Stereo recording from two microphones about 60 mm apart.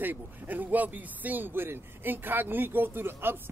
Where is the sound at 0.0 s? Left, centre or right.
Right.